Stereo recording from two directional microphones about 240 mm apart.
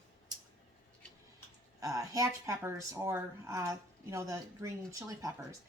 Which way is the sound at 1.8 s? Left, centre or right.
Centre.